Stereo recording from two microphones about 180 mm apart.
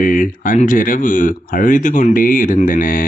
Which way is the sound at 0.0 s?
50° left (ahead or behind).